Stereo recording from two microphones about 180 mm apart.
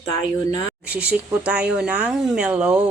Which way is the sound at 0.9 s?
10° right (ahead or behind).